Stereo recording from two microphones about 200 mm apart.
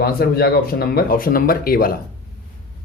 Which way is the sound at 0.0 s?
50° left (ahead or behind).